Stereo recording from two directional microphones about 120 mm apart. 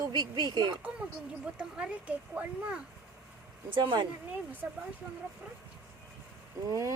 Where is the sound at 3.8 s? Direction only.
40° right (ahead or behind).